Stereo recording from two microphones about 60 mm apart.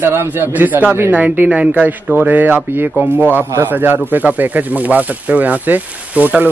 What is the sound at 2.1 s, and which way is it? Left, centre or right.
Speech, right.